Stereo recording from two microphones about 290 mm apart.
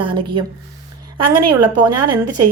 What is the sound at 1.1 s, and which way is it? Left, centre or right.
A woman's voice, right.